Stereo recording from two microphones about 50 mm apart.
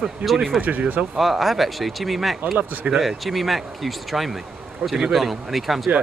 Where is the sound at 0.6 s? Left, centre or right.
Right.